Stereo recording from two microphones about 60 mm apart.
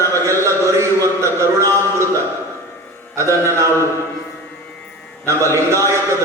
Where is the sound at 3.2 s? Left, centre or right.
Right.